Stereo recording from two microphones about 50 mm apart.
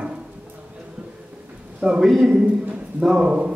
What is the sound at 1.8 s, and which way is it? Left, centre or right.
Speech, centre.